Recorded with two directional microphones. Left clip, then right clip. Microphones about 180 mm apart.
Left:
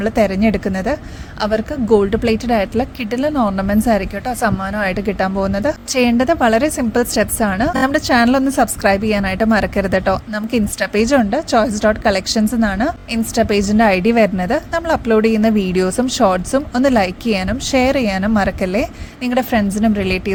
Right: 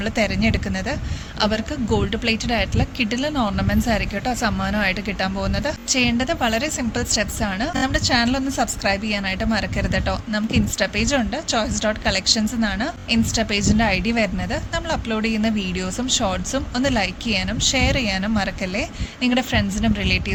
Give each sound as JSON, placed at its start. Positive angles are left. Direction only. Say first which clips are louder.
{"t": 0.0, "sound": "a woman's voice", "louder": "left 6 dB", "side_deg": 50}